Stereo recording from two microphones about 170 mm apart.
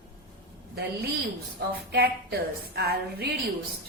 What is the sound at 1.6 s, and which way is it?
A woman's voice, 70° right (ahead or behind).